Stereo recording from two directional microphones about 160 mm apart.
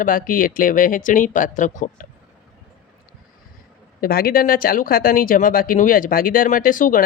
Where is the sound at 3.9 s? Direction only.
65° left (ahead or behind).